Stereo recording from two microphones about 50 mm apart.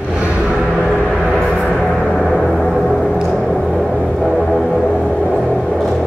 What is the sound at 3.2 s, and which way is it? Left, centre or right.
Music, centre.